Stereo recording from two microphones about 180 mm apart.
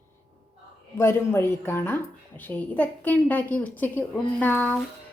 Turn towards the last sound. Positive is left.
turn(degrees=10)  # may be behind; listen again after turning